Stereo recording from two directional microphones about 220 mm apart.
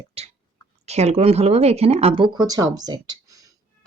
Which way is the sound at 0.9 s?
30° right (ahead or behind).